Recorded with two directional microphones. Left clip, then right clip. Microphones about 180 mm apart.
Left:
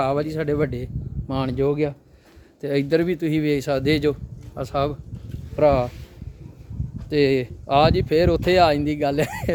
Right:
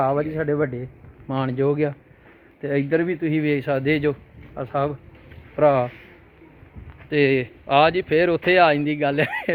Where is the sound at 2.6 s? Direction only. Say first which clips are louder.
Left 1 dB; 30° left (ahead or behind).